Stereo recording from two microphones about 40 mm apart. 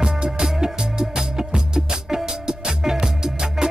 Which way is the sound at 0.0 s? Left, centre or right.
Centre.